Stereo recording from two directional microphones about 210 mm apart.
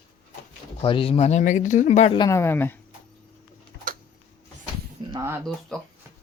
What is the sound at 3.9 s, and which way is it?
Tick-tock, 40° right (ahead or behind).